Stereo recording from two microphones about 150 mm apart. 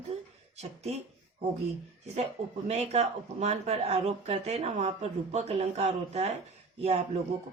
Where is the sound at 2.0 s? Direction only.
45° right (ahead or behind).